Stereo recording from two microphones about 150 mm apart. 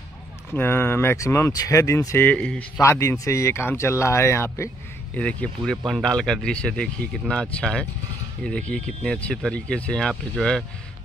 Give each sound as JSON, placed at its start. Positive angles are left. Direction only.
{"t": 0.5, "sound": "speech", "side_deg": 15}
{"t": 2.8, "sound": "speech", "side_deg": 20}